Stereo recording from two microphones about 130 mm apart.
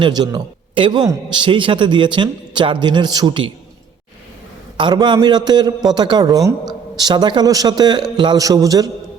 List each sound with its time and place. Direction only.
0.0 s a man's voice: 30° right (ahead or behind)
4.8 s a man's voice: 35° right (ahead or behind)